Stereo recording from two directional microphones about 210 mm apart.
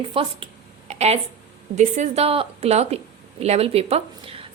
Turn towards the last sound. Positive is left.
turn(degrees=-30)  # may be behind; listen again after turning